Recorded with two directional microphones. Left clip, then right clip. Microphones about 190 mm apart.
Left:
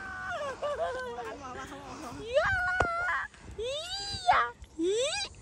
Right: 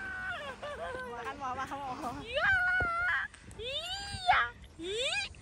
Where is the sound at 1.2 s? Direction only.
10° left (ahead or behind).